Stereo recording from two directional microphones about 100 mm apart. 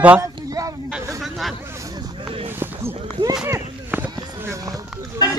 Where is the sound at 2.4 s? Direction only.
20° right (ahead or behind).